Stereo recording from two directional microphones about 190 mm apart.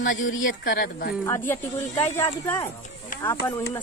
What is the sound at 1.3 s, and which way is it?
Speech, 10° left (ahead or behind).